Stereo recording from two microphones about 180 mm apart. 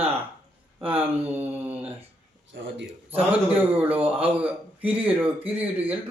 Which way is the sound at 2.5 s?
90° right.